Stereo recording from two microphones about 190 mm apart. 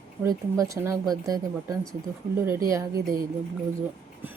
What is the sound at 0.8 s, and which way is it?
Speech, 15° right (ahead or behind).